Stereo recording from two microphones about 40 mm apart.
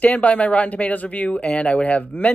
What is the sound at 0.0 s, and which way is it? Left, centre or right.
Speech, left.